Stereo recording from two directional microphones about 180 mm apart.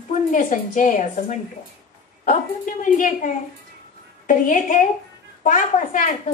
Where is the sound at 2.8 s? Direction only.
45° left (ahead or behind).